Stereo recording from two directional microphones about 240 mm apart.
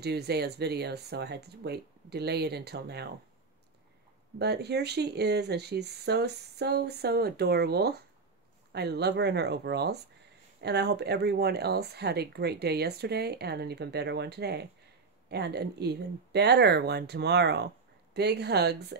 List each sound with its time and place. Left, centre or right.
0.0 s speech: right
4.4 s speech: right